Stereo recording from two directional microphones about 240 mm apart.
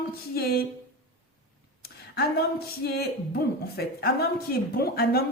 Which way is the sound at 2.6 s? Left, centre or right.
Left.